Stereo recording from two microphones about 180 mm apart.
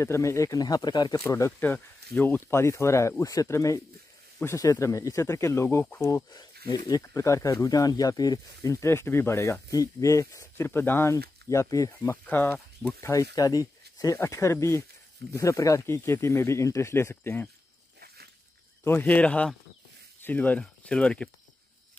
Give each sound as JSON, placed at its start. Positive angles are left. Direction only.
{"t": 0.0, "sound": "speech", "side_deg": 15}
{"t": 13.1, "sound": "speech", "side_deg": 20}
{"t": 18.0, "sound": "a sound", "side_deg": -60}
{"t": 18.9, "sound": "speech", "side_deg": 10}